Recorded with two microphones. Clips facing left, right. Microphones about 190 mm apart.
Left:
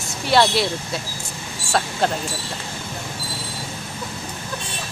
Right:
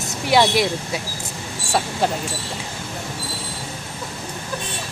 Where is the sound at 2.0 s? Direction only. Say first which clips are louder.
Even; 10° right (ahead or behind).